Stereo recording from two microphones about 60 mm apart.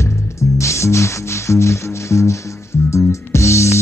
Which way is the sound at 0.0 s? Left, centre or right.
Left.